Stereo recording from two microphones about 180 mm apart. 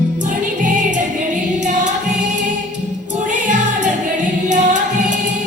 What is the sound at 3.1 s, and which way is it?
Music, 45° right (ahead or behind).